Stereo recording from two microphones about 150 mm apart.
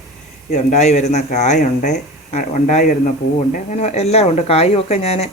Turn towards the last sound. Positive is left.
turn(degrees=45)  # may be behind; listen again after turning